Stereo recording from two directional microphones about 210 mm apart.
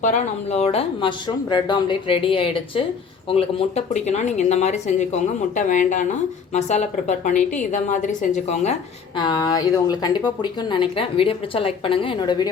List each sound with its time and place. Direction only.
0.0 s speech: 35° left (ahead or behind)
9.1 s speech: 20° left (ahead or behind)